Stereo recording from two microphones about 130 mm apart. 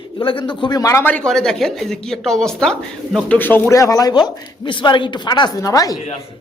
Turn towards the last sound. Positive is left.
turn(degrees=25)  # may be behind; listen again after turning